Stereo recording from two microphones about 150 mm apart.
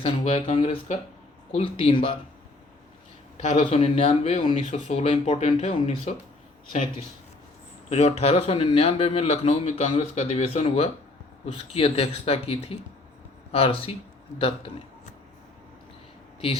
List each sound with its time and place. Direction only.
0.0 s a man's voice: 35° left (ahead or behind)
3.3 s a man's voice: 45° left (ahead or behind)
7.9 s a man's voice: 45° left (ahead or behind)